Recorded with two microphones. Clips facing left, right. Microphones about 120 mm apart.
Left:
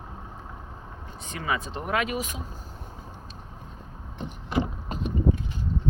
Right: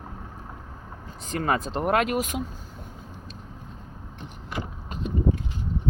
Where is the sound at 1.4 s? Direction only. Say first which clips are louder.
Right 5 dB; 50° right (ahead or behind).